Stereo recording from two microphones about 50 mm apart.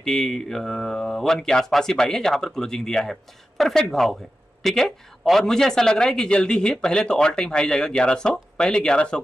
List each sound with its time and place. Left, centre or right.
0.0 s speech: centre